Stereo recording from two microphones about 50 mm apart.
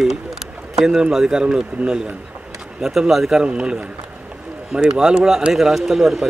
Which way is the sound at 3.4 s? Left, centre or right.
Centre.